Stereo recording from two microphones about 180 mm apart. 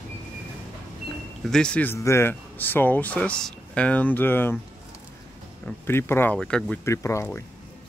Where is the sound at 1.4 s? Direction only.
5° left (ahead or behind).